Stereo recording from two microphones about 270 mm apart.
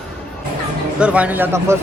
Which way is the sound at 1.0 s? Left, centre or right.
Centre.